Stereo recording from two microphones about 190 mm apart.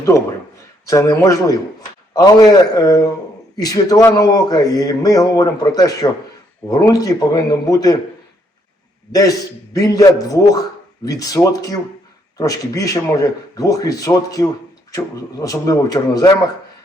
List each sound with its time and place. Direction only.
0.9 s a man's voice: 15° left (ahead or behind)
9.1 s a man's voice: 20° left (ahead or behind)